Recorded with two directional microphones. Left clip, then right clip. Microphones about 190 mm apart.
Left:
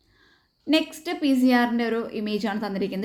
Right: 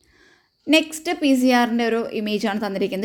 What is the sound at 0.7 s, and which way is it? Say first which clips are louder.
A woman's voice: right 5 dB; 40° right (ahead or behind).